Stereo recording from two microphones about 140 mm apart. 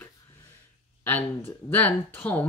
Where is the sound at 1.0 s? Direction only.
15° left (ahead or behind).